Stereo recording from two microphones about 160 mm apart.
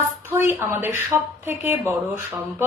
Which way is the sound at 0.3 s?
15° right (ahead or behind).